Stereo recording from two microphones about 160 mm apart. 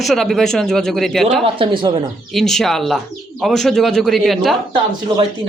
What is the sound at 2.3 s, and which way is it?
Speech, centre (ahead or behind).